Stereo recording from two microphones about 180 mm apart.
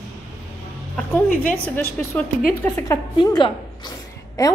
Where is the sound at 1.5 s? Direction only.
10° left (ahead or behind).